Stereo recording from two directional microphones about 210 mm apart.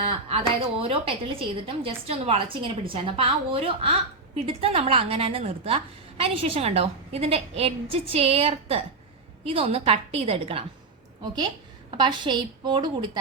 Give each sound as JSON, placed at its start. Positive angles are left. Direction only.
{"t": 0.1, "sound": "a woman's voice", "side_deg": -25}